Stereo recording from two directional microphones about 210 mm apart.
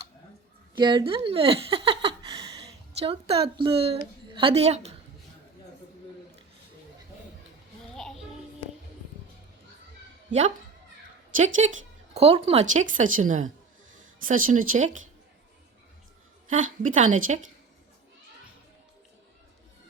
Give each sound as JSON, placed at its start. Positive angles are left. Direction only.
{"t": 0.8, "sound": "speech", "side_deg": -20}
{"t": 7.9, "sound": "music", "side_deg": 0}
{"t": 11.6, "sound": "a woman's voice", "side_deg": -30}
{"t": 16.5, "sound": "a woman's voice", "side_deg": -35}